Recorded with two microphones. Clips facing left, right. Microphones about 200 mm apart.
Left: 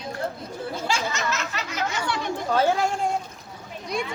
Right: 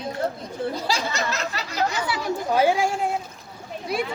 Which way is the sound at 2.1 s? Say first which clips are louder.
Right 1 dB; 10° right (ahead or behind).